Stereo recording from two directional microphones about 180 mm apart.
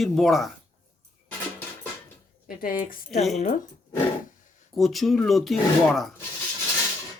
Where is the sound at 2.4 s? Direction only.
50° left (ahead or behind).